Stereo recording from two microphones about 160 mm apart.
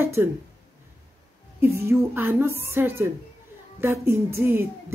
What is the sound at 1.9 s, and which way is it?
Speech, 15° right (ahead or behind).